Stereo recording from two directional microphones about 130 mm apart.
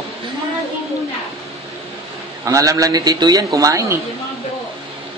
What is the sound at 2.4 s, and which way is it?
Speech, 25° right (ahead or behind).